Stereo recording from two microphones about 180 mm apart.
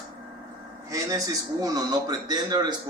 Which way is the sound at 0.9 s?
20° right (ahead or behind).